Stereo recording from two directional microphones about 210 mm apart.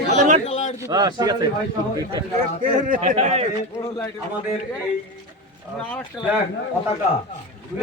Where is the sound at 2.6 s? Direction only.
40° right (ahead or behind).